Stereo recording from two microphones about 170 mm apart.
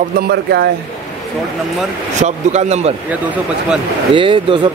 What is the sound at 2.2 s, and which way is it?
Speech, 40° right (ahead or behind).